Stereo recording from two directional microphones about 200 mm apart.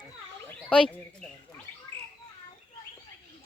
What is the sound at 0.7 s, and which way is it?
Speech, 5° left (ahead or behind).